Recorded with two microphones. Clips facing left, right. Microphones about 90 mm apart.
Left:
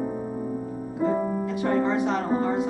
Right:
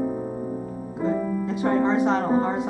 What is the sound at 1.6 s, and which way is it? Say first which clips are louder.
Music: right 3 dB; 30° right (ahead or behind).